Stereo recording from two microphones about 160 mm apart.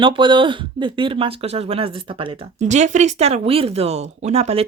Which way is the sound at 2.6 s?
50° right (ahead or behind).